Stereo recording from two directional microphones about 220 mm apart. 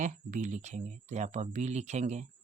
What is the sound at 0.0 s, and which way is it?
Speech, 35° right (ahead or behind).